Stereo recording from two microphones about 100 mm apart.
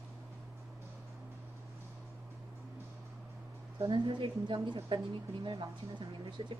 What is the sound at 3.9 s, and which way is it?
A woman's voice, 55° right (ahead or behind).